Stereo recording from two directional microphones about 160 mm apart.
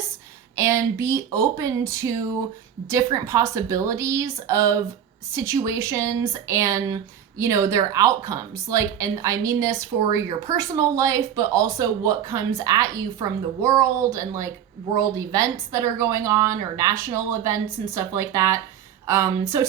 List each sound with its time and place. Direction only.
0.5 s speech: 20° right (ahead or behind)